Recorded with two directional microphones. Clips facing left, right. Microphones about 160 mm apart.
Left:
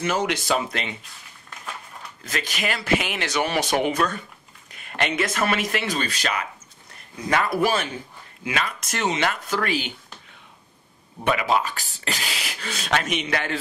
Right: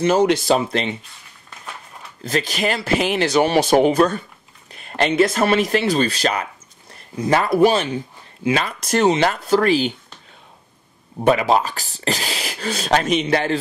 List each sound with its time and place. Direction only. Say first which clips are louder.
0.0 s speech: right 8 dB; 30° right (ahead or behind)
2.2 s speech: right 7 dB; 30° right (ahead or behind)
11.1 s speech: right 6 dB; 35° right (ahead or behind)